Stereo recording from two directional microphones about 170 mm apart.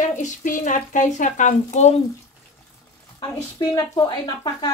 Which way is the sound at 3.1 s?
20° left (ahead or behind).